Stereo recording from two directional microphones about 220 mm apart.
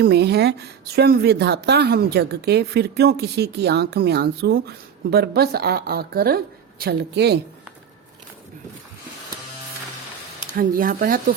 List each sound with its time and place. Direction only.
0.0 s a woman's voice: 50° right (ahead or behind)
10.6 s speech: 40° right (ahead or behind)